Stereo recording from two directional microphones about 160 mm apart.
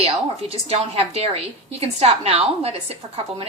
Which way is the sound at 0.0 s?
40° right (ahead or behind).